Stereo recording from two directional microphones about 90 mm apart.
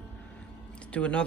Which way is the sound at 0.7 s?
10° left (ahead or behind).